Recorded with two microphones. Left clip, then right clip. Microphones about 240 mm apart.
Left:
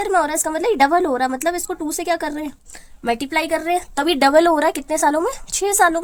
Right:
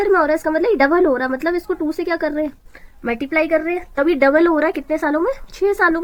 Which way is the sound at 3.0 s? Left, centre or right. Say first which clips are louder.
Right 1 dB; left.